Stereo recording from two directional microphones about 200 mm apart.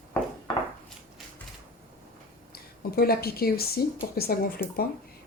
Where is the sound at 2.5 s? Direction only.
50° left (ahead or behind).